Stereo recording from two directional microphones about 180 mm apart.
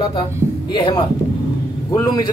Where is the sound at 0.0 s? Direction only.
25° left (ahead or behind).